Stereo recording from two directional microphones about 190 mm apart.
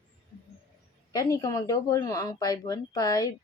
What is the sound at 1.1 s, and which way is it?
Speech, 15° left (ahead or behind).